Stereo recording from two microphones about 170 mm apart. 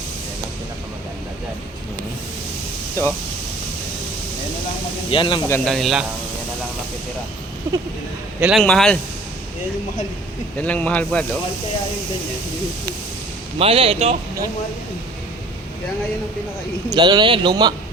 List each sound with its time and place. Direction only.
5.1 s speech: 30° left (ahead or behind)
5.5 s speech: 5° left (ahead or behind)
8.4 s a man's voice: 5° right (ahead or behind)
8.6 s speech: 5° left (ahead or behind)
10.6 s speech: 10° left (ahead or behind)
13.6 s speech: 35° right (ahead or behind)
16.9 s speech: 25° right (ahead or behind)